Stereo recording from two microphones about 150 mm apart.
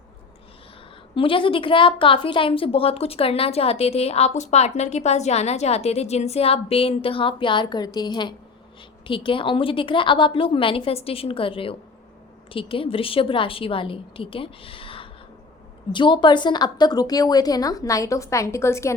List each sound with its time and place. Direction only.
1.1 s a woman's voice: 35° left (ahead or behind); by 18.9 s 20° left (ahead or behind)